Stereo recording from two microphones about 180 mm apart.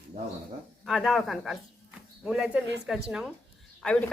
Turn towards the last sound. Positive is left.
turn(degrees=5)  # may be behind; listen again after turning